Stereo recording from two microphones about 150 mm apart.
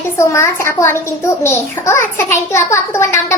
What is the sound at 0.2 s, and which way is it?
A child's voice, 15° left (ahead or behind).